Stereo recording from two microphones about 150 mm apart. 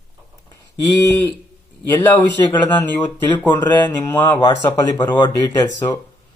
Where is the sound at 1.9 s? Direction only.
20° left (ahead or behind).